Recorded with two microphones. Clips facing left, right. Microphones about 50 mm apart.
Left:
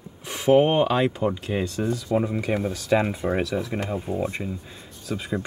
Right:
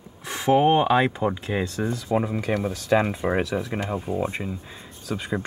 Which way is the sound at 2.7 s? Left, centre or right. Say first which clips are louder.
Right 2 dB; centre.